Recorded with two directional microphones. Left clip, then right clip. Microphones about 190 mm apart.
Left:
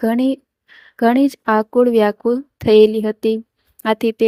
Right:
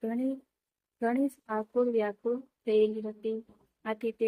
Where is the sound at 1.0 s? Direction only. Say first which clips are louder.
Left 16 dB; 55° left (ahead or behind).